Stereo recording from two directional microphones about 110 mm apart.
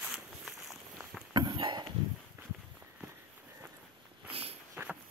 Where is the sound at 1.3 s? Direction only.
40° right (ahead or behind).